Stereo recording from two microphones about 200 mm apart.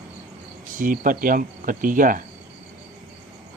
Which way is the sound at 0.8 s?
40° right (ahead or behind).